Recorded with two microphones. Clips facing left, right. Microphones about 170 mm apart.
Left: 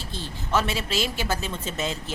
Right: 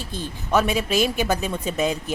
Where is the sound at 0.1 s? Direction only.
15° right (ahead or behind).